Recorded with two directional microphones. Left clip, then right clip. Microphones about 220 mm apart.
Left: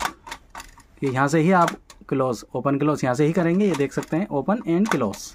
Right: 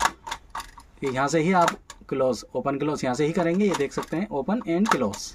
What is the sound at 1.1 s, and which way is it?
Speech, 40° left (ahead or behind).